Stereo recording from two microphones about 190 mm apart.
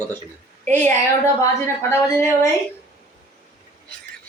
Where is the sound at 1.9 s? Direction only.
15° left (ahead or behind).